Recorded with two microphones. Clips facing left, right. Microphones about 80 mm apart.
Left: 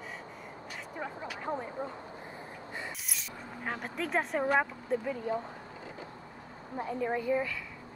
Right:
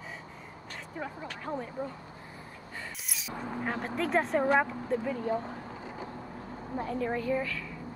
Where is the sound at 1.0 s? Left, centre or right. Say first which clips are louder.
Even; centre.